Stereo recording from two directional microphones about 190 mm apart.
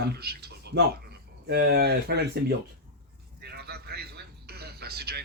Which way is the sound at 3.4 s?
55° right (ahead or behind).